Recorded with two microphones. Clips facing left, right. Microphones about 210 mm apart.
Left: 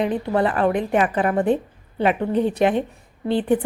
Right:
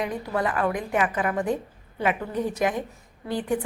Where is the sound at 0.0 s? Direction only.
30° left (ahead or behind).